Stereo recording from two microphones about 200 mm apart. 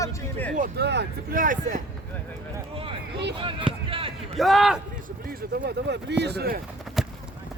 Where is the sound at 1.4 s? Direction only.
40° right (ahead or behind).